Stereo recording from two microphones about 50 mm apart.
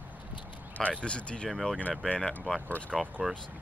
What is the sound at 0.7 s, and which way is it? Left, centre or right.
Speech, left.